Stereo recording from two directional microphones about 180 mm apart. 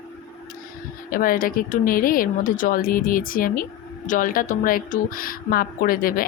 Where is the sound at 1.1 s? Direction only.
50° left (ahead or behind).